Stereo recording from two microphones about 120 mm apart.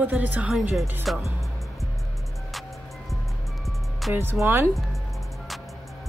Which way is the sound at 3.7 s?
Centre (ahead or behind).